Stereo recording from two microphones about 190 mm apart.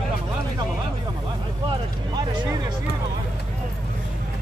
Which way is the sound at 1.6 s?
25° right (ahead or behind).